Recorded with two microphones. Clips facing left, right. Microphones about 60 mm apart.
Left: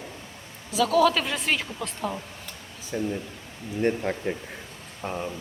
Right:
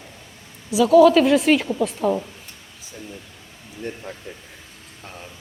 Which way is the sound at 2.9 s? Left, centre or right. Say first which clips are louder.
Left 10 dB; left.